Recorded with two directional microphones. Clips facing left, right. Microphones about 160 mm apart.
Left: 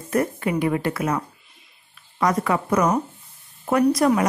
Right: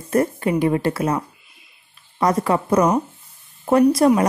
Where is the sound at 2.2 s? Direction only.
30° right (ahead or behind).